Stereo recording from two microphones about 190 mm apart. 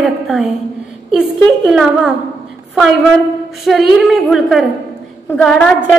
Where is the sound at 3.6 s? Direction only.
Centre (ahead or behind).